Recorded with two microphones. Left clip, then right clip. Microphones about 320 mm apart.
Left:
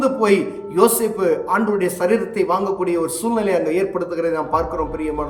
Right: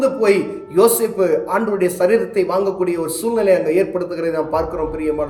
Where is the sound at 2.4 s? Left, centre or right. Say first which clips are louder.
Right 2 dB; left.